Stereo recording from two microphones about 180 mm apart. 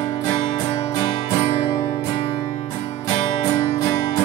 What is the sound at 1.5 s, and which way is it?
Music, 20° left (ahead or behind).